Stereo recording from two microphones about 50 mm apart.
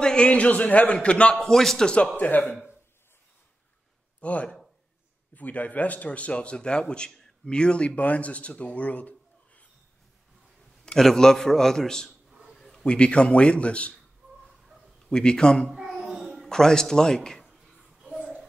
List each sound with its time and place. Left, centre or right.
0.0 s a man's voice: centre
1.4 s a man's voice: centre
2.1 s speech: left
4.2 s a man's voice: left
11.0 s a man's voice: centre
12.3 s a sound: centre
12.5 s a sound: centre
12.8 s a man's voice: left
15.0 s a man's voice: centre
15.7 s babbling: centre
16.4 s a sound: centre